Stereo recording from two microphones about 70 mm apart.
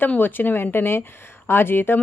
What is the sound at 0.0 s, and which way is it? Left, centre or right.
Speech, left.